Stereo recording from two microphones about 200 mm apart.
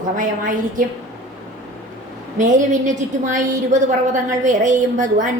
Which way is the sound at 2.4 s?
40° right (ahead or behind).